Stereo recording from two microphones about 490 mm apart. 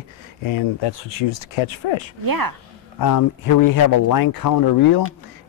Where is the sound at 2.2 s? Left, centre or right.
Right.